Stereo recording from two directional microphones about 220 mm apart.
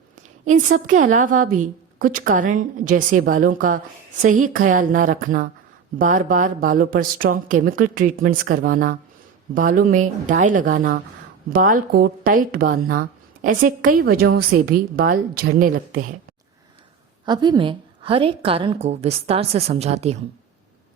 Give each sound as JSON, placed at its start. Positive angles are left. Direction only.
{"t": 0.2, "sound": "a woman's voice", "side_deg": -35}
{"t": 17.2, "sound": "a woman's voice", "side_deg": -20}